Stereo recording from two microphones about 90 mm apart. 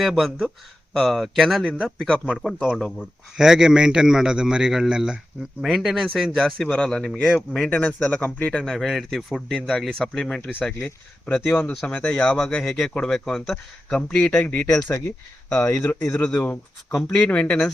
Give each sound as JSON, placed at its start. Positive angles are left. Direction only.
{"t": 0.0, "sound": "a man's voice", "side_deg": 0}
{"t": 14.8, "sound": "speech", "side_deg": 25}
{"t": 15.4, "sound": "a man's voice", "side_deg": 15}